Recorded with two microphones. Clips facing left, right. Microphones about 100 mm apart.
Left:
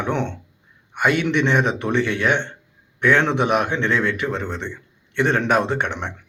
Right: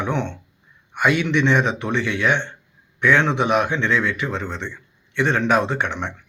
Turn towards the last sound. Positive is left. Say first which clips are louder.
# left 1 dB
turn(degrees=55)  # may be behind; listen again after turning